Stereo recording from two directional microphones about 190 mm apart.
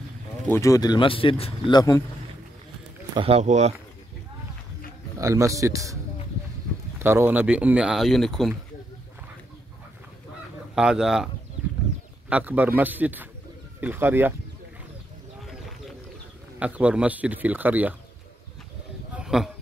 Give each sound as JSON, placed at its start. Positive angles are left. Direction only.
{"t": 0.5, "sound": "speech", "side_deg": 15}
{"t": 3.2, "sound": "speech", "side_deg": -35}
{"t": 5.2, "sound": "speech", "side_deg": -15}
{"t": 7.0, "sound": "speech", "side_deg": -10}
{"t": 10.7, "sound": "speech", "side_deg": -5}
{"t": 12.3, "sound": "speech", "side_deg": -10}
{"t": 16.5, "sound": "speech", "side_deg": -5}
{"t": 19.1, "sound": "a sound", "side_deg": -5}